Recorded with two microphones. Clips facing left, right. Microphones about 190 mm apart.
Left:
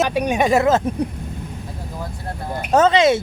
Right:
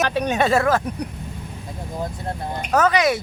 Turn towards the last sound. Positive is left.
turn(degrees=25)  # may be behind; listen again after turning